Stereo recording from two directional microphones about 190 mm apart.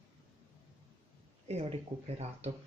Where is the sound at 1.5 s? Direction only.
35° right (ahead or behind).